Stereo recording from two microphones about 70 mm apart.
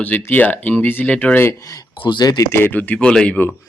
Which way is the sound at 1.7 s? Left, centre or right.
Left.